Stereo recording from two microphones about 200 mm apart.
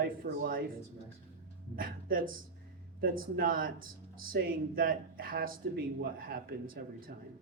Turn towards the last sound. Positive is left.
turn(degrees=-45)  # may be behind; listen again after turning